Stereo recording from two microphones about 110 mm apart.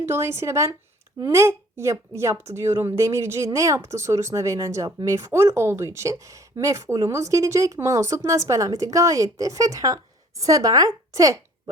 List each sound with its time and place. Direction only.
0.0 s a woman's voice: 20° right (ahead or behind)